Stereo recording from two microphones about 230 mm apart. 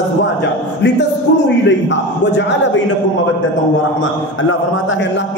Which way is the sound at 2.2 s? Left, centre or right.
Left.